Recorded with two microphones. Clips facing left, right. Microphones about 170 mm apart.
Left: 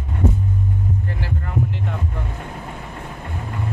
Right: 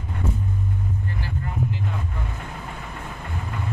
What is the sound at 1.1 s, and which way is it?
Vehicle, 70° left (ahead or behind).